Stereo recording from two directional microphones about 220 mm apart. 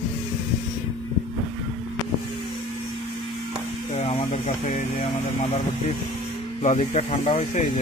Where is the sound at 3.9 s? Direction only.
30° left (ahead or behind).